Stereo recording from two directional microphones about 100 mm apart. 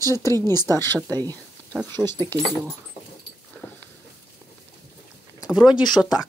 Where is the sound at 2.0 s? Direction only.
25° left (ahead or behind).